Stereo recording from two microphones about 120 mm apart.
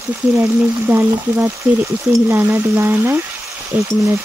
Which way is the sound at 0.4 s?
20° right (ahead or behind).